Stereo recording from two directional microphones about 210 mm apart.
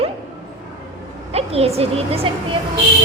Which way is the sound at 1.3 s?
30° right (ahead or behind).